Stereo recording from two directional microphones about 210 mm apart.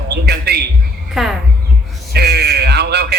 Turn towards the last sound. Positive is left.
turn(degrees=-50)  # may be behind; listen again after turning